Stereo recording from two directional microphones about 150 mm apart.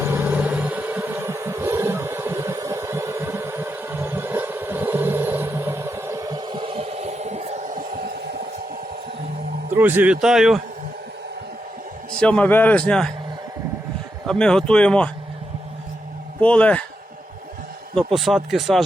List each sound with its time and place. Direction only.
0.0 s vehicle: 15° right (ahead or behind); by 8.2 s 80° right
9.7 s a man's voice: 10° right (ahead or behind)
12.2 s a man's voice: 10° left (ahead or behind)
14.3 s a man's voice: 5° left (ahead or behind)
16.4 s a man's voice: 10° left (ahead or behind)
17.9 s speech: centre (ahead or behind)